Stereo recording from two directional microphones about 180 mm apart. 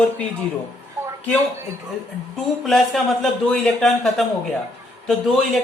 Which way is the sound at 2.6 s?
Centre (ahead or behind).